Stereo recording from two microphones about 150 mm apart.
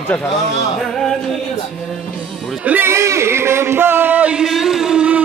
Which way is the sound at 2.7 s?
15° right (ahead or behind).